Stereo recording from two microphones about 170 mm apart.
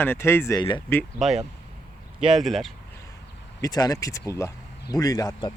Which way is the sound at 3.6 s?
20° left (ahead or behind).